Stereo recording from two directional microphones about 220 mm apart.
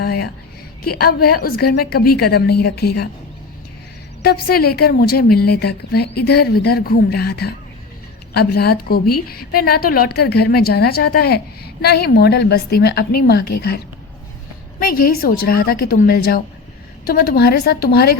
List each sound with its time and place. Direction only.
0.0 s a sound: 45° left (ahead or behind)
0.9 s a woman's voice: 45° left (ahead or behind)
4.2 s a woman's voice: 45° left (ahead or behind)